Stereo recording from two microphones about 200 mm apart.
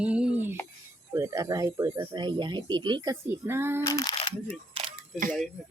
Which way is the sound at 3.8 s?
20° left (ahead or behind).